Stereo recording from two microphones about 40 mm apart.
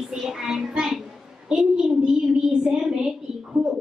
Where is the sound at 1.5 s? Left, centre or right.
Centre.